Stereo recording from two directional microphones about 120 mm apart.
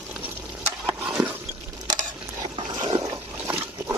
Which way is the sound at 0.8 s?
10° right (ahead or behind).